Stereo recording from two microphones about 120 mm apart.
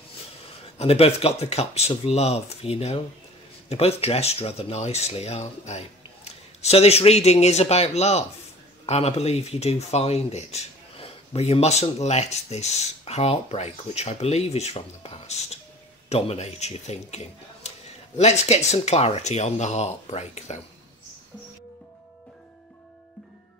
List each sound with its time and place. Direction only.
0.7 s speech: 55° left (ahead or behind); by 20.6 s 70° left (ahead or behind)